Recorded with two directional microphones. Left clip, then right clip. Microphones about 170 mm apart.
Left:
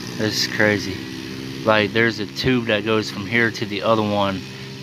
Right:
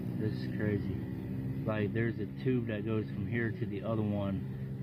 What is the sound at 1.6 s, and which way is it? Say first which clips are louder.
Speech: left 19 dB; 35° left (ahead or behind).